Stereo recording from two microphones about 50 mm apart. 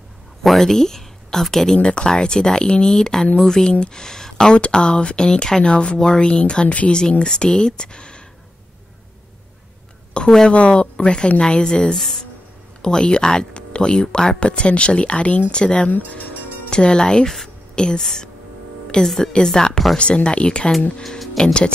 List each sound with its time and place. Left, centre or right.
0.4 s speech: centre
1.8 s speech: centre
10.1 s speech: centre